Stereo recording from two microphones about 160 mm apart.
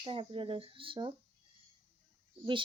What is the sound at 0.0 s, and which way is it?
Speech, 35° right (ahead or behind).